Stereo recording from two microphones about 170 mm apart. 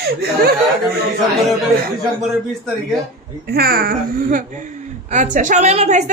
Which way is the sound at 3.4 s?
65° right (ahead or behind).